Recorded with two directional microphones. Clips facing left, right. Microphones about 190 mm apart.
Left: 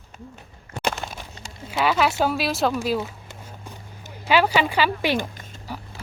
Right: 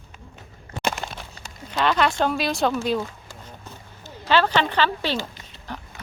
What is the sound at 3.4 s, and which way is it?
Run, 15° left (ahead or behind).